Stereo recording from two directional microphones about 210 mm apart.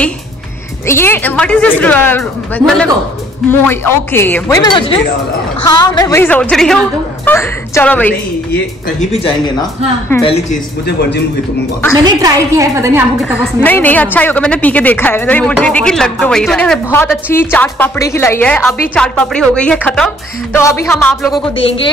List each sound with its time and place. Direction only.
0.8 s a woman's voice: 10° left (ahead or behind)
9.1 s speech: 25° left (ahead or behind)
10.9 s a man's voice: 55° left (ahead or behind)
12.0 s a woman's voice: 20° right (ahead or behind)
13.6 s a woman's voice: 10° left (ahead or behind)